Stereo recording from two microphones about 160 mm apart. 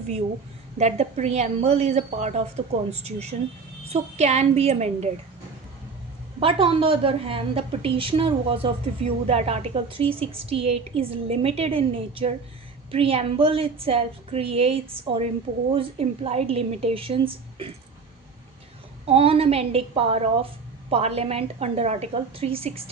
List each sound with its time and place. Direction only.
0.8 s a woman's voice: 45° right (ahead or behind)
6.4 s a woman's voice: 35° right (ahead or behind)
19.0 s a woman's voice: 35° right (ahead or behind)